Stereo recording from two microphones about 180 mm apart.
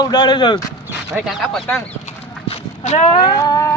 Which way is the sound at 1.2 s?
Centre (ahead or behind).